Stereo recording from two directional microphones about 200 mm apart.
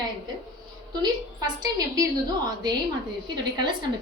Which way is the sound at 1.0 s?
20° right (ahead or behind).